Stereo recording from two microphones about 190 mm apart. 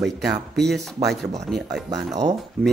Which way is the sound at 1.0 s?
25° right (ahead or behind).